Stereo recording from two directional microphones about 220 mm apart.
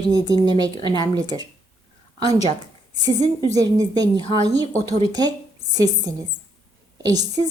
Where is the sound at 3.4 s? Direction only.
15° right (ahead or behind).